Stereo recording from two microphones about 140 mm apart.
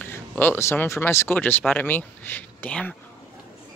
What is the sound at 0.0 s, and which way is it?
Speech, 15° left (ahead or behind).